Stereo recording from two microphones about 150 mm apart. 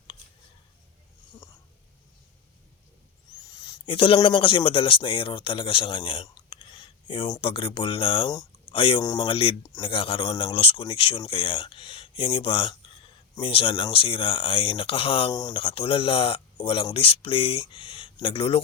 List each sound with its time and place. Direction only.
3.4 s a sound: 25° left (ahead or behind)
3.8 s speech: 35° left (ahead or behind)
9.0 s speech: 25° left (ahead or behind)
9.3 s speech: 40° left (ahead or behind)
15.3 s speech: 25° left (ahead or behind)
15.5 s speech: 35° left (ahead or behind)